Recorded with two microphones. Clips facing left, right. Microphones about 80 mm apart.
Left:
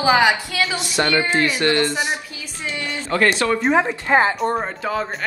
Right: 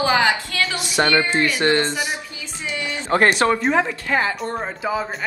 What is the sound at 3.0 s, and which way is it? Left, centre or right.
Speech, right.